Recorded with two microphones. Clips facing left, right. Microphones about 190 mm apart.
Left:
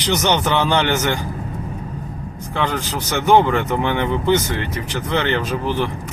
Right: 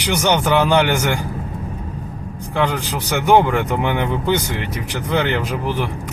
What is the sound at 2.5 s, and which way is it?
Speech, 15° right (ahead or behind).